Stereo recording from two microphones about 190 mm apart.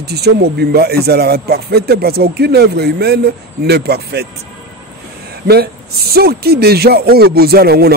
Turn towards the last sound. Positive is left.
turn(degrees=-55)  # may be behind; listen again after turning